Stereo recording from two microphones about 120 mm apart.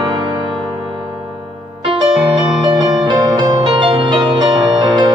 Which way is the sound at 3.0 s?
40° right (ahead or behind).